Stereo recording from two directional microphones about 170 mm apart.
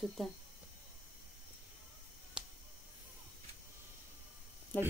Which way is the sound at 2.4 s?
5° right (ahead or behind).